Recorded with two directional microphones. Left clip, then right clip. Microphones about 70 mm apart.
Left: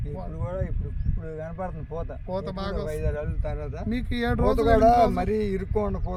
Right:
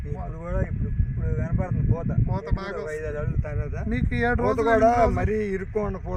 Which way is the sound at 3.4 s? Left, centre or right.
Centre.